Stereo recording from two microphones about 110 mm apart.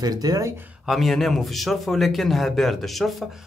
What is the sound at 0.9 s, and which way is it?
A man's voice, centre (ahead or behind).